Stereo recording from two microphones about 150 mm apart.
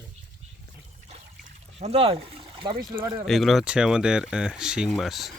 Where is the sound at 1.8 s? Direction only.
40° right (ahead or behind).